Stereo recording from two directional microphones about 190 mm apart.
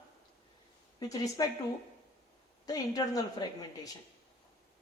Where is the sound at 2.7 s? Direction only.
20° left (ahead or behind).